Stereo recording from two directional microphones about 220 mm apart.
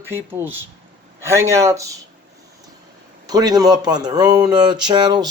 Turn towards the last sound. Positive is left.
turn(degrees=-20)  # may be behind; listen again after turning